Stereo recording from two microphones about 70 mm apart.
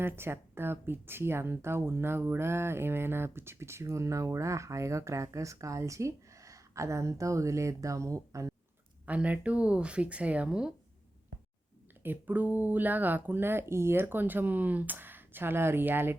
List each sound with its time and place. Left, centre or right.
0.0 s speech: right
9.0 s speech: right
12.0 s speech: right